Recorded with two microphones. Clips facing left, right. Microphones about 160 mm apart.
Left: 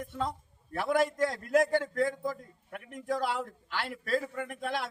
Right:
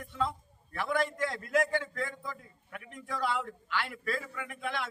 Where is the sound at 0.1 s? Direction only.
45° left (ahead or behind).